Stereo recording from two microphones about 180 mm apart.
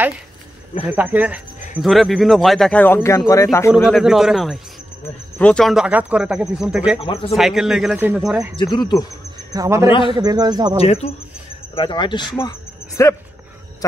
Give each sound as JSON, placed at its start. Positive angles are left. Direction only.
{"t": 0.8, "sound": "speech", "side_deg": -10}
{"t": 3.7, "sound": "speech", "side_deg": -5}
{"t": 7.0, "sound": "speech", "side_deg": 30}
{"t": 7.3, "sound": "speech", "side_deg": 0}
{"t": 9.5, "sound": "speech", "side_deg": -15}
{"t": 9.8, "sound": "a man's voice", "side_deg": 30}
{"t": 10.1, "sound": "speech", "side_deg": -20}
{"t": 10.8, "sound": "speech", "side_deg": 35}